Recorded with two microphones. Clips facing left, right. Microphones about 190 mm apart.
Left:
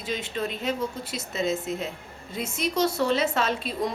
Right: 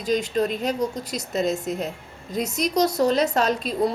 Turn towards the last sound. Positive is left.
turn(degrees=-35)  # may be behind; listen again after turning